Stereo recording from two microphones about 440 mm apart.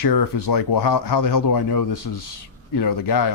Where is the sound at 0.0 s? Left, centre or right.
Left.